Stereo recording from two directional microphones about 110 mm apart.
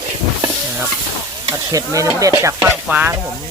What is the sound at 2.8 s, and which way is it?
Stir, 15° right (ahead or behind).